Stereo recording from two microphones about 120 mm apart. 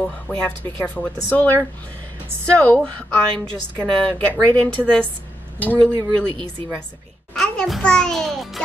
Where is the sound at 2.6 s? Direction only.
15° left (ahead or behind).